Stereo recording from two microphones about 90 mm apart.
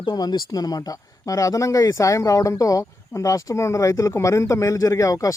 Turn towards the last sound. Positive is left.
turn(degrees=40)  # may be behind; listen again after turning